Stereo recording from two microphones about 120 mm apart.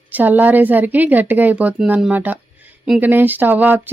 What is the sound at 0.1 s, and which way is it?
Speech, 15° right (ahead or behind).